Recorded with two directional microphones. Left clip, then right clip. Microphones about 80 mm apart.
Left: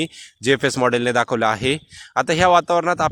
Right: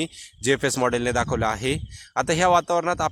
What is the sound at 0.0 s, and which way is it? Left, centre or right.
Speech, left.